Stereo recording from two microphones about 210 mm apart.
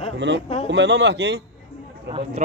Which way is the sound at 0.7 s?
60° right (ahead or behind).